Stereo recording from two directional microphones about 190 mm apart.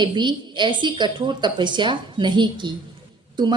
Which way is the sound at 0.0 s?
25° right (ahead or behind).